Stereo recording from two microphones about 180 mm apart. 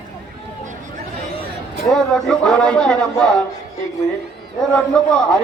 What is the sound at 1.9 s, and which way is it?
Speech, 5° left (ahead or behind).